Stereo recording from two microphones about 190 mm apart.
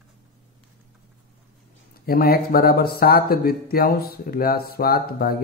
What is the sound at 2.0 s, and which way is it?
Speech, 50° left (ahead or behind).